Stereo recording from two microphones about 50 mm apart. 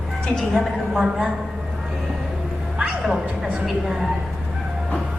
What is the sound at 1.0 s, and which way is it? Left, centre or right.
Speech, centre.